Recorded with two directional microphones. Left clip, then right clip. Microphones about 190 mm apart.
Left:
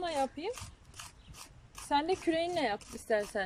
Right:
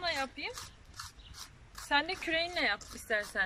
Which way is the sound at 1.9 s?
30° left (ahead or behind).